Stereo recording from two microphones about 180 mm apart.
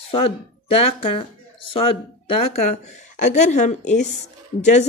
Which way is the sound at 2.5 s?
40° left (ahead or behind).